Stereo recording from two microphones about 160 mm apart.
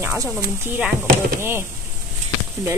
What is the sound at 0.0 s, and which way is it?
Speech, 20° right (ahead or behind).